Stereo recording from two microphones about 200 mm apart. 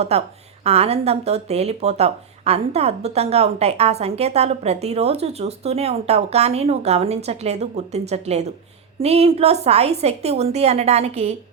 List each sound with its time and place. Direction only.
0.1 s speech: 30° right (ahead or behind)